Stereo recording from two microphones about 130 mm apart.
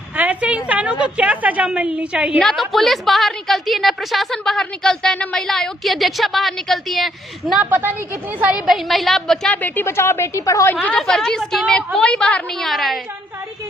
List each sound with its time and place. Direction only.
0.2 s a sound: 10° right (ahead or behind)
1.0 s a woman's voice: 10° right (ahead or behind)
2.4 s a woman's voice: centre (ahead or behind)
7.6 s a woman's voice: 15° right (ahead or behind)
8.4 s a woman's voice: 5° right (ahead or behind); by 10.8 s 25° left (ahead or behind)
10.8 s a woman's voice: 5° left (ahead or behind)